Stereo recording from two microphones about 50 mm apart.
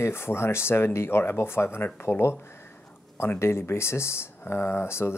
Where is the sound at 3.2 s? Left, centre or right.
Left.